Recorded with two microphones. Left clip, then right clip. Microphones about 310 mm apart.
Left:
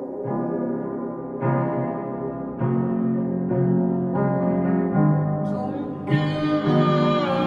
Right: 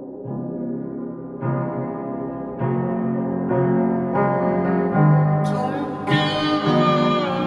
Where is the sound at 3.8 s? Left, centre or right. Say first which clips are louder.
Right 4 dB; right.